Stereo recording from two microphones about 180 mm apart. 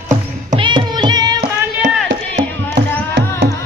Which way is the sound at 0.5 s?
25° right (ahead or behind).